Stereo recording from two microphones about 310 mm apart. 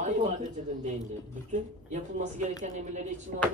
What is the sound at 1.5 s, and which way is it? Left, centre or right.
Speech, right.